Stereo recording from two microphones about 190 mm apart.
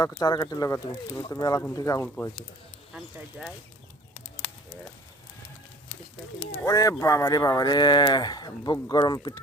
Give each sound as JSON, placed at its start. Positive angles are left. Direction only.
{"t": 0.0, "sound": "speech", "side_deg": 20}
{"t": 2.9, "sound": "speech", "side_deg": 0}
{"t": 6.7, "sound": "speech", "side_deg": 20}